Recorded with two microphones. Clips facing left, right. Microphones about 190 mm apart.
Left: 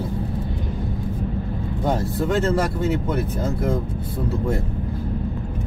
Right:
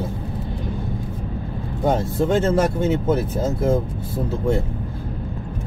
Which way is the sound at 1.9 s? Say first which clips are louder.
Right 3 dB; 25° right (ahead or behind).